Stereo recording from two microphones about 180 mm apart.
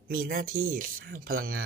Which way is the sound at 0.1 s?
55° right (ahead or behind).